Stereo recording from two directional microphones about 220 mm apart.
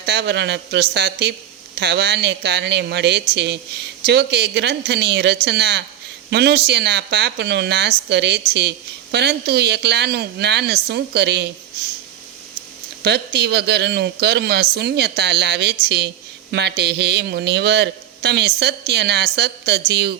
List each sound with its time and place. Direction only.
0.0 s a man's voice: 50° right (ahead or behind)
13.0 s a man's voice: 50° right (ahead or behind)